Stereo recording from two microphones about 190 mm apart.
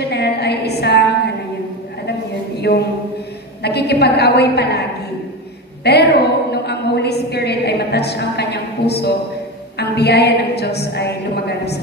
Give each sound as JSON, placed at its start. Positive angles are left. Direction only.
{"t": 0.0, "sound": "a sound", "side_deg": 60}
{"t": 2.6, "sound": "a woman's voice", "side_deg": 60}
{"t": 5.9, "sound": "a woman's voice", "side_deg": 60}